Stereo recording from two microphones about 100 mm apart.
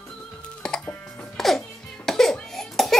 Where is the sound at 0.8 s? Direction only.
15° left (ahead or behind).